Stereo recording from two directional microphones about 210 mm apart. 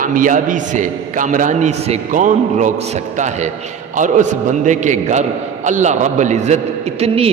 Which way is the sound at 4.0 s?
35° right (ahead or behind).